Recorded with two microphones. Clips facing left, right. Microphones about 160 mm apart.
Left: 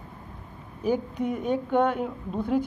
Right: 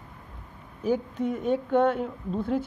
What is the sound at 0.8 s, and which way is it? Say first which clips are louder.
A woman's voice: even; 10° left (ahead or behind).